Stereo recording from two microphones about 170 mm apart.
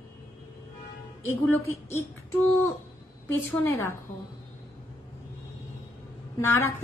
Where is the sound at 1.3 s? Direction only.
15° left (ahead or behind).